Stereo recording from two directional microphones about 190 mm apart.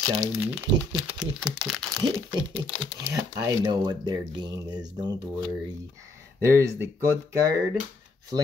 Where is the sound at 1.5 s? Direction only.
Centre (ahead or behind).